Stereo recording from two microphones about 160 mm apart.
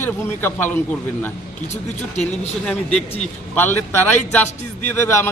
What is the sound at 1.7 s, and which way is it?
A man's voice, 45° left (ahead or behind).